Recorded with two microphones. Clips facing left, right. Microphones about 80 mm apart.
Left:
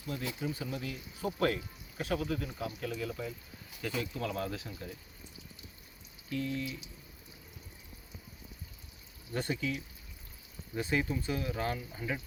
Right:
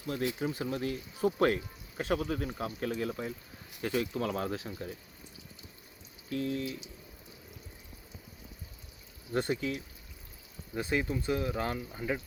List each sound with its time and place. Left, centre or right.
0.1 s speech: right
6.3 s speech: right
9.3 s speech: right